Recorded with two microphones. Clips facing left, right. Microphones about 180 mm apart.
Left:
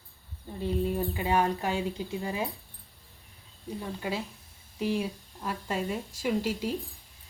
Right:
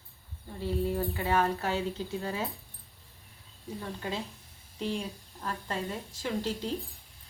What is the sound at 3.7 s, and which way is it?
A woman's voice, 10° left (ahead or behind).